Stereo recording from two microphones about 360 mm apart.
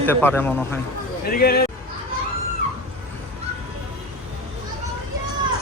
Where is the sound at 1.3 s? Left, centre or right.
Left.